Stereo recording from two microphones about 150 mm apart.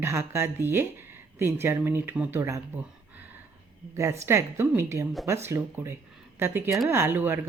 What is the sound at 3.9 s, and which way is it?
Speech, 20° right (ahead or behind).